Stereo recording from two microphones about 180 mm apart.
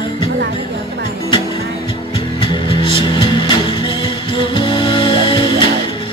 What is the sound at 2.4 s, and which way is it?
Music, 30° left (ahead or behind).